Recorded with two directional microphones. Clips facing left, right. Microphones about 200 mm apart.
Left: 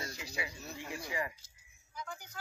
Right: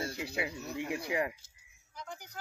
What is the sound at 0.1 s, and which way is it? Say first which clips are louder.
Speech: right 6 dB; 60° right (ahead or behind).